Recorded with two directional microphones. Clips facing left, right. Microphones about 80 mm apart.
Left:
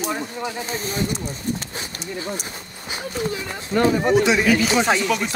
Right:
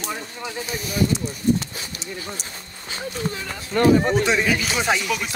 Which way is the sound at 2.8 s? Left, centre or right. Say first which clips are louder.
Left 2 dB; centre.